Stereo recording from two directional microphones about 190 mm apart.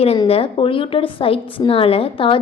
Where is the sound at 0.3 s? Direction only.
30° left (ahead or behind).